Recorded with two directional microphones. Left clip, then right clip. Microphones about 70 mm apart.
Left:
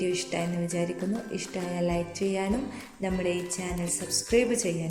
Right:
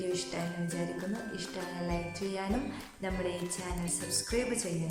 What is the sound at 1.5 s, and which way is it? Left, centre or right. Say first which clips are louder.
Speech: left 9 dB; left.